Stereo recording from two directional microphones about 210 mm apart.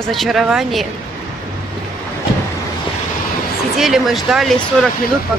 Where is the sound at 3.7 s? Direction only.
Centre (ahead or behind).